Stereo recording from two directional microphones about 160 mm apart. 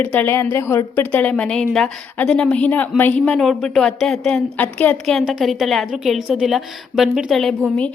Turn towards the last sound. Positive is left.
turn(degrees=5)  # may be behind; listen again after turning